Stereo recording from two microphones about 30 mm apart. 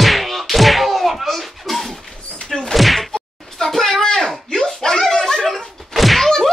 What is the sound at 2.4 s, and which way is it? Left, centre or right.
Slam, centre.